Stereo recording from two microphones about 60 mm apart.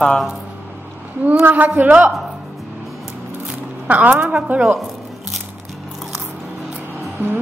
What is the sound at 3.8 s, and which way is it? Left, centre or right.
Speech, right.